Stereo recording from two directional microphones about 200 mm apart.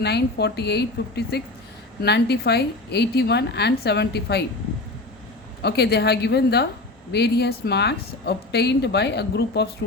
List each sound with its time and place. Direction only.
0.0 s a woman's voice: 55° left (ahead or behind)
5.6 s a woman's voice: 55° left (ahead or behind)